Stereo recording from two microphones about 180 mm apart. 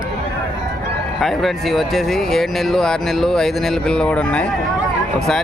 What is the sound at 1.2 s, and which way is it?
Speech, centre (ahead or behind).